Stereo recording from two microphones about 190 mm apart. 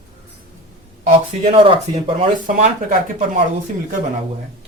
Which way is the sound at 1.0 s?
35° right (ahead or behind).